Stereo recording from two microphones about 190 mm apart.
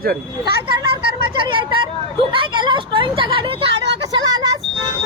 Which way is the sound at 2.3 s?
25° right (ahead or behind).